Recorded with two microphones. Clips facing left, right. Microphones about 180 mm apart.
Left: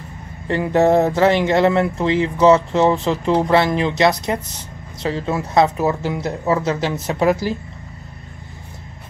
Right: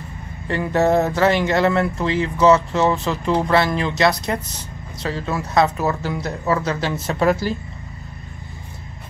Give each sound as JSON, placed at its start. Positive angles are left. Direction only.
{"t": 0.5, "sound": "speech", "side_deg": 25}